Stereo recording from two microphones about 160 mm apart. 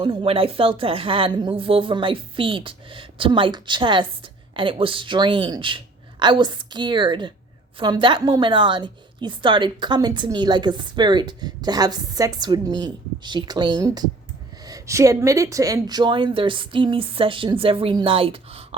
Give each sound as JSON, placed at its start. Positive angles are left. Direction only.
{"t": 0.0, "sound": "a woman's voice", "side_deg": -35}